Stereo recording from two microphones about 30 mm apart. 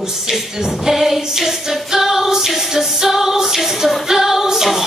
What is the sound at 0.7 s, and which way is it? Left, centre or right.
Finger snapping, centre.